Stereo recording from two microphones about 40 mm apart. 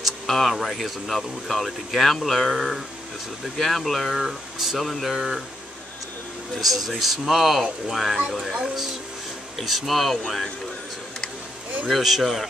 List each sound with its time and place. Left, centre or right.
0.3 s speech: centre
4.1 s speech: centre
5.1 s speech: centre
6.5 s speech: centre
9.6 s speech: centre
11.9 s speech: centre